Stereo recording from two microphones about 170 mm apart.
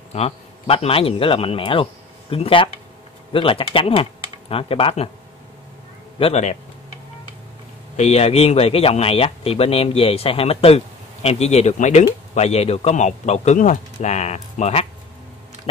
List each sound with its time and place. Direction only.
0.1 s a man's voice: 35° left (ahead or behind)
6.1 s speech: 35° left (ahead or behind)
7.9 s speech: 40° left (ahead or behind)